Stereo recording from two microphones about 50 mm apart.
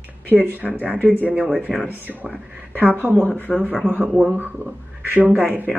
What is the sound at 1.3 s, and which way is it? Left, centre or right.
Speech, right.